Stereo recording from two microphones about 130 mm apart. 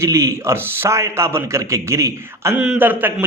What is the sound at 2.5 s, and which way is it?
Speech, 5° right (ahead or behind).